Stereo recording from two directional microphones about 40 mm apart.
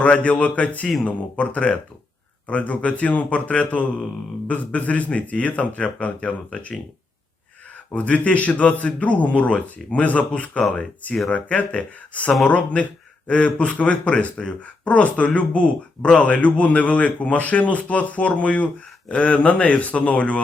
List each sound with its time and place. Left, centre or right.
0.0 s speech: left
7.9 s speech: left